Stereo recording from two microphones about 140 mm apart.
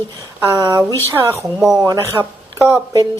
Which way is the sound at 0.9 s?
15° left (ahead or behind).